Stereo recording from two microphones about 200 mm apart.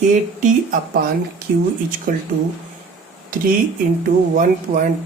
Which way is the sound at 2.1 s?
45° right (ahead or behind).